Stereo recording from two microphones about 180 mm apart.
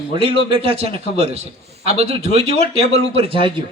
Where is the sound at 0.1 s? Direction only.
30° right (ahead or behind).